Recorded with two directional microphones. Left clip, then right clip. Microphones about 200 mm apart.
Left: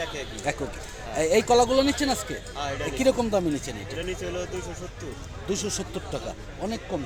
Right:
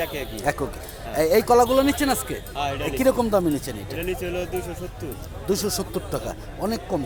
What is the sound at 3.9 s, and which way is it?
Speech, 50° right (ahead or behind).